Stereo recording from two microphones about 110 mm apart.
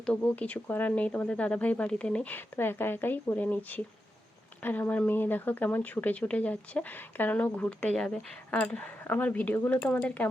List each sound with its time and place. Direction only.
0.0 s speech: 10° left (ahead or behind)